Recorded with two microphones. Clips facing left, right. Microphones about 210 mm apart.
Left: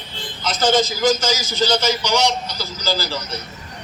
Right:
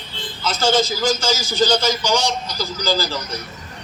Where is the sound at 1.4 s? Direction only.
15° right (ahead or behind).